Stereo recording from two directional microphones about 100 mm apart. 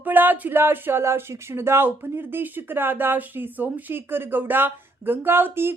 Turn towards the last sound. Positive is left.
turn(degrees=-25)  # may be behind; listen again after turning